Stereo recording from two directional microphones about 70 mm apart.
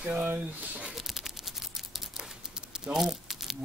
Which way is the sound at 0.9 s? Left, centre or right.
Centre.